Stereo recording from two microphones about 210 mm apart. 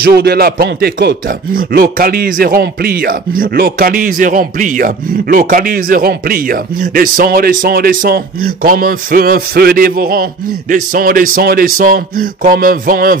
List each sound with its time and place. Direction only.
0.0 s speech: 50° right (ahead or behind)